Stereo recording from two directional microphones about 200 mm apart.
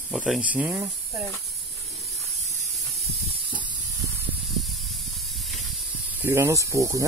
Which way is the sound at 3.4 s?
25° right (ahead or behind).